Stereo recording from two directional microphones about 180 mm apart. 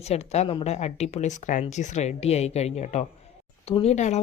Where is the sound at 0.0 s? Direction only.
35° left (ahead or behind).